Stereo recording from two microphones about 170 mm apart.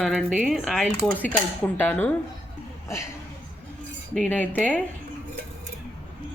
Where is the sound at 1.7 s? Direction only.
10° left (ahead or behind).